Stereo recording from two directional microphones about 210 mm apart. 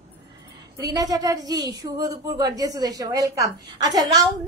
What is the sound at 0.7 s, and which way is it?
A woman's voice, 20° right (ahead or behind).